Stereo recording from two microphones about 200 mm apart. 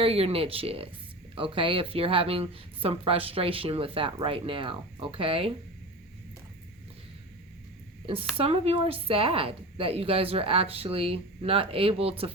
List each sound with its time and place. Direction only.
0.0 s speech: 30° right (ahead or behind)
8.0 s speech: 25° right (ahead or behind)